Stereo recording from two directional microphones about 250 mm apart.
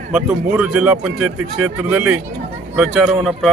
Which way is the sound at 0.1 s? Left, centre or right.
Centre.